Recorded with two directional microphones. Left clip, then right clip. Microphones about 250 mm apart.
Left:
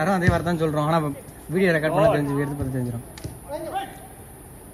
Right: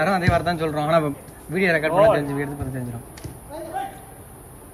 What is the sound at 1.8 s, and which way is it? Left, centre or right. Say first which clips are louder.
Speech: right 5 dB; right.